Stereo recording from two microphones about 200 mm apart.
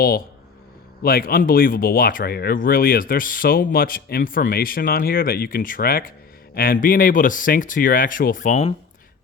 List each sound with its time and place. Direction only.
1.0 s speech: 50° left (ahead or behind)